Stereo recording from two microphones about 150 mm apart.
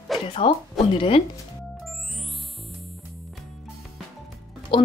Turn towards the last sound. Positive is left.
turn(degrees=35)  # may be behind; listen again after turning